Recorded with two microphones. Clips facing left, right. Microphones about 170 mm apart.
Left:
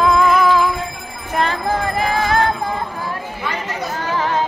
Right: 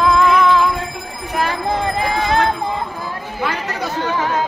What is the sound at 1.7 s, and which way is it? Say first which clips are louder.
Jingle bell: even; 20° right (ahead or behind).